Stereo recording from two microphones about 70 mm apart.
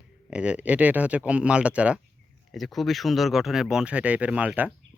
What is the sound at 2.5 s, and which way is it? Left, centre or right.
Speech, centre.